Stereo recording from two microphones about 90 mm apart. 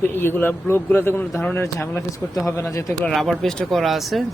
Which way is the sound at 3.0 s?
5° left (ahead or behind).